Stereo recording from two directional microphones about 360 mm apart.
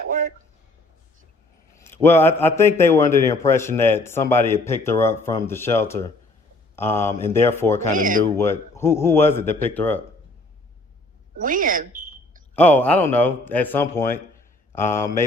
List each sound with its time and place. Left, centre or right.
0.1 s speech: right
1.7 s a man's voice: centre
7.9 s speech: right
8.4 s a man's voice: centre
11.3 s speech: right
12.5 s a man's voice: centre